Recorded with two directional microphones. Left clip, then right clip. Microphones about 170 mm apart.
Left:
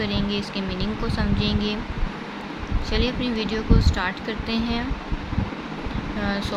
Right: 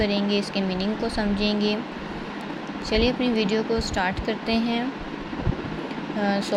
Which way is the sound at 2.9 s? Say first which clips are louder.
Right 3 dB; 10° right (ahead or behind).